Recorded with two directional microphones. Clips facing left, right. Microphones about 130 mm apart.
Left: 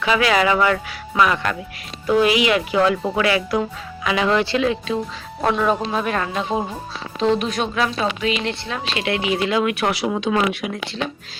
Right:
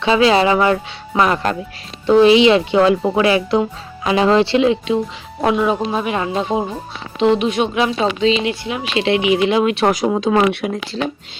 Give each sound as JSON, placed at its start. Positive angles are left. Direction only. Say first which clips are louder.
{"t": 0.0, "sound": "speech", "louder": "right 5 dB", "side_deg": -25}
{"t": 5.5, "sound": "speech", "louder": "right 3 dB", "side_deg": -10}
{"t": 9.8, "sound": "speech", "louder": "right 5 dB", "side_deg": -40}